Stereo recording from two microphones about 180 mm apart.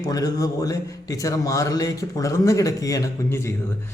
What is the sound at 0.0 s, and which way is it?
A man's voice, 20° left (ahead or behind).